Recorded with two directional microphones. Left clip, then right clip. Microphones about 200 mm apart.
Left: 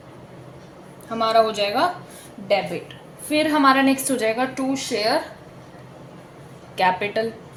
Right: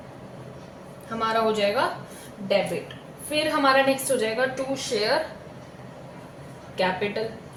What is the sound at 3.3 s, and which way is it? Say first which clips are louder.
A woman's voice: left 3 dB; 50° left (ahead or behind).